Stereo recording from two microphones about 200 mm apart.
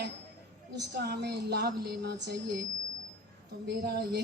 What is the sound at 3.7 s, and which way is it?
Speech, 55° right (ahead or behind).